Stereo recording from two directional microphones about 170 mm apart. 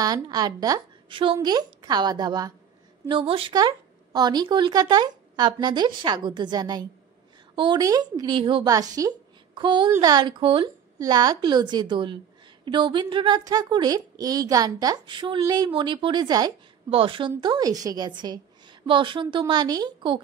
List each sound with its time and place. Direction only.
0.0 s a woman's voice: 25° right (ahead or behind)